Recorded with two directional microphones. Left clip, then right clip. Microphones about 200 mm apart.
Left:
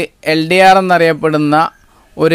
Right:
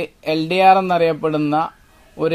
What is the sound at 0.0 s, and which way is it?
Speech, 30° left (ahead or behind).